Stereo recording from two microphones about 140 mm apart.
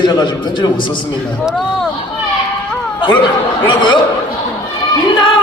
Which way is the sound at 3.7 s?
35° left (ahead or behind).